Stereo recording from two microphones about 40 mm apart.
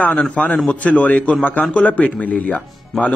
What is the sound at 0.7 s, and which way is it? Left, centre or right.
A man's voice, left.